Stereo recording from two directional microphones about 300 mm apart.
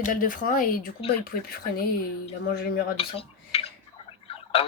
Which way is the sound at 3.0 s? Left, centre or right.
Centre.